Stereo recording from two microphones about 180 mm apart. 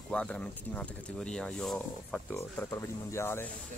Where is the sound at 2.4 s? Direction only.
15° left (ahead or behind).